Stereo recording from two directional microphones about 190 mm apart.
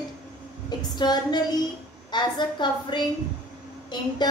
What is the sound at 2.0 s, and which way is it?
Speech, 25° left (ahead or behind).